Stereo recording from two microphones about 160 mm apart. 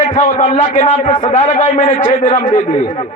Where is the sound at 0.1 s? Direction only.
50° left (ahead or behind).